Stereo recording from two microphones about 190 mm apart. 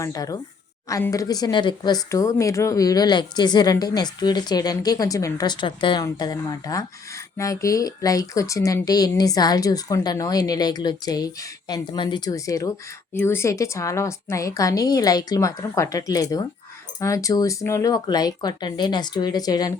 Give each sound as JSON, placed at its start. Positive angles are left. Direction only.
{"t": 0.0, "sound": "a woman's voice", "side_deg": 20}